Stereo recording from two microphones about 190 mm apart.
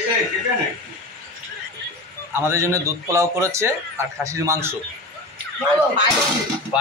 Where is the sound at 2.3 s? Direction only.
15° right (ahead or behind).